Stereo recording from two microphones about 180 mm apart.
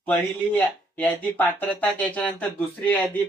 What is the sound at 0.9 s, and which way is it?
Speech, 10° left (ahead or behind).